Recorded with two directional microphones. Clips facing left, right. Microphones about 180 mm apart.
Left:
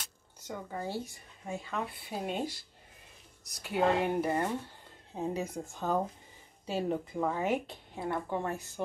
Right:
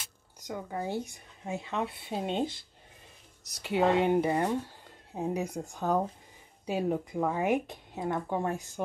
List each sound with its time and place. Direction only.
0.0 s speech: 10° right (ahead or behind)
3.6 s a woman's voice: 20° right (ahead or behind)